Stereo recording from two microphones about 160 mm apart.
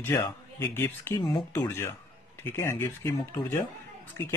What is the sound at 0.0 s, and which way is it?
Speech, 15° left (ahead or behind).